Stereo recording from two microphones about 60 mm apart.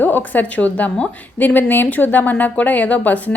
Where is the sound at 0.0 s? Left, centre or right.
Left.